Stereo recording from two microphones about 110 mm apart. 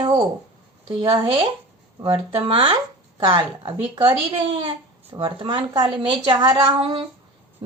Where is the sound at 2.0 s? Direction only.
35° right (ahead or behind).